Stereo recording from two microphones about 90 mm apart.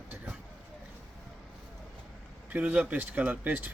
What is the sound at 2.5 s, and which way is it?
A man's voice, 15° right (ahead or behind).